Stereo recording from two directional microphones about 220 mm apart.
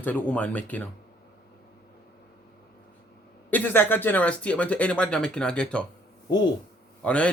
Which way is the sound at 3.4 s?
10° left (ahead or behind).